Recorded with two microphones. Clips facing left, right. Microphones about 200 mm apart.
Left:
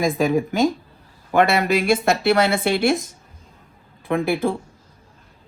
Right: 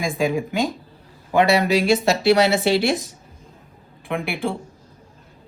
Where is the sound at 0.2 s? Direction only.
45° left (ahead or behind).